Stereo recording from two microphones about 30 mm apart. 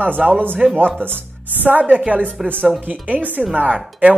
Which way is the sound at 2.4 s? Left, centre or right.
Centre.